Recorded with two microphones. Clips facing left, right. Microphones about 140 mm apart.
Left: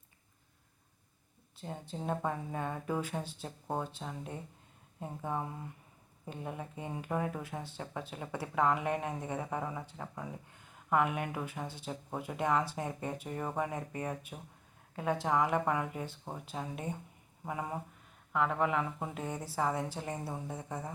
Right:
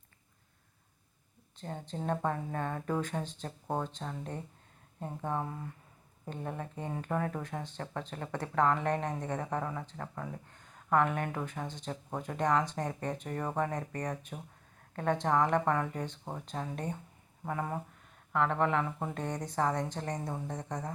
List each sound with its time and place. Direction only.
1.5 s speech: 10° left (ahead or behind)